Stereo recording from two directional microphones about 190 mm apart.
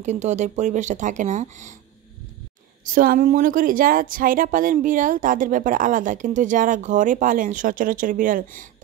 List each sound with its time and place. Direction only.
0.0 s speech: 40° right (ahead or behind)
2.8 s speech: 45° right (ahead or behind)